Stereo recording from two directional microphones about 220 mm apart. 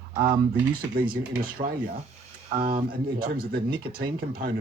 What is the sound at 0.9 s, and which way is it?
Speech, 40° right (ahead or behind).